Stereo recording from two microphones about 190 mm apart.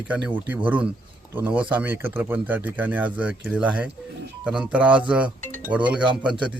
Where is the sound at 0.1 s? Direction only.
10° right (ahead or behind).